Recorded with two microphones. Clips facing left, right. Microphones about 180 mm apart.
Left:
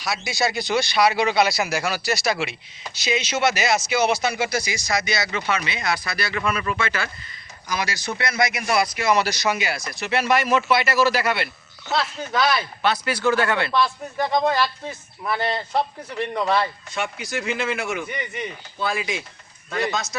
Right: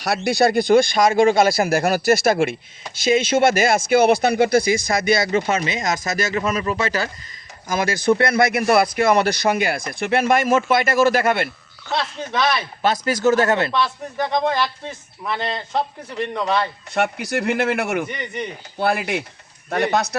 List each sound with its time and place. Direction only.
0.0 s a man's voice: 60° right (ahead or behind); by 7.1 s 40° right (ahead or behind)
7.7 s a man's voice: 50° right (ahead or behind)
12.8 s a man's voice: 45° right (ahead or behind)
13.7 s speech: 5° left (ahead or behind)
16.9 s speech: 60° right (ahead or behind)